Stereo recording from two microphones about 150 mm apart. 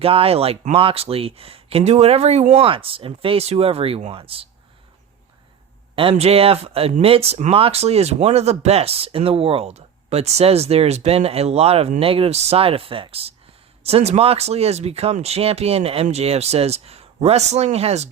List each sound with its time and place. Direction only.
0.0 s speech: 40° right (ahead or behind)
6.0 s speech: 40° right (ahead or behind)